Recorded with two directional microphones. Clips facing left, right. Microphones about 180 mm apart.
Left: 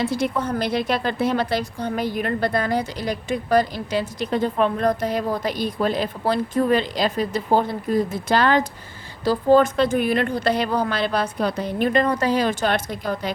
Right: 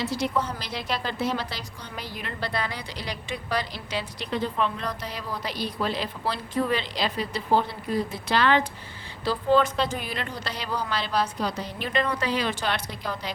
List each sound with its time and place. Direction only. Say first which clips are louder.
0.0 s a woman's voice: left 4 dB; 55° left (ahead or behind)